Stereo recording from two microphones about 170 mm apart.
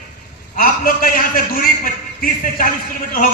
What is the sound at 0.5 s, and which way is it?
Speech, 60° left (ahead or behind).